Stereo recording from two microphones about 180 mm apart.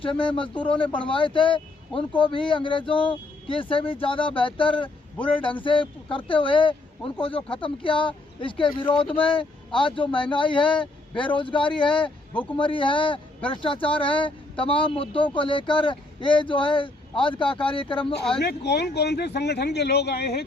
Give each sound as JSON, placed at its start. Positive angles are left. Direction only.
{"t": 0.0, "sound": "speech", "side_deg": 30}
{"t": 18.3, "sound": "speech", "side_deg": 70}